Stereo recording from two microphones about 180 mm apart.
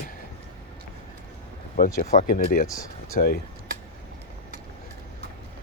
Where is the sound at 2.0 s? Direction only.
45° left (ahead or behind).